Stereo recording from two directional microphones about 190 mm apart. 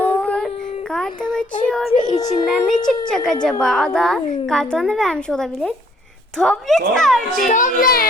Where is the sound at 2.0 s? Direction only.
40° left (ahead or behind).